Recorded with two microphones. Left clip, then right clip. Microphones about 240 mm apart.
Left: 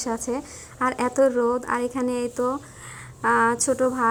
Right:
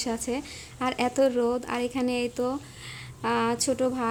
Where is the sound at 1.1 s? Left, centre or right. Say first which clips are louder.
Left 4 dB; centre.